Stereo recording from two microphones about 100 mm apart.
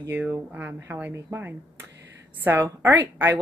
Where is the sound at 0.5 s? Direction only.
20° right (ahead or behind).